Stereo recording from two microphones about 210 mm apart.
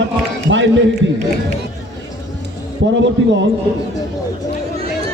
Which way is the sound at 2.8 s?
60° right (ahead or behind).